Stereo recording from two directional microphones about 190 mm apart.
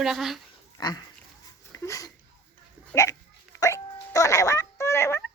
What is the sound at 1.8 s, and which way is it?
Speech, 15° left (ahead or behind).